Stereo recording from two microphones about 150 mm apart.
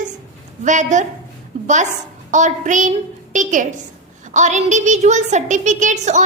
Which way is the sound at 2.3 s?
55° right (ahead or behind).